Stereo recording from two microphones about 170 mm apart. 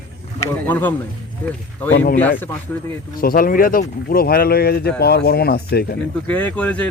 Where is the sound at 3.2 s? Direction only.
60° left (ahead or behind).